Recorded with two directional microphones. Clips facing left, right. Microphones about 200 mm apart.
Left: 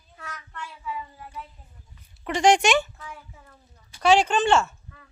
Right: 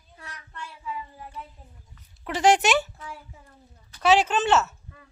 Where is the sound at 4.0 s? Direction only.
5° right (ahead or behind).